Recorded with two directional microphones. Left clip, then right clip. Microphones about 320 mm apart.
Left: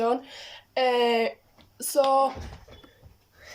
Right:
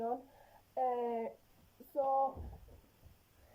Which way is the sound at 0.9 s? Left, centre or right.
Left.